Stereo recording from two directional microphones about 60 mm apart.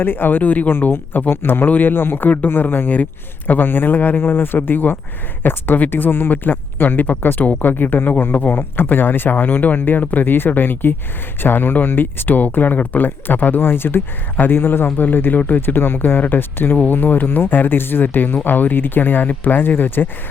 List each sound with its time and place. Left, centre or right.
0.0 s speech: left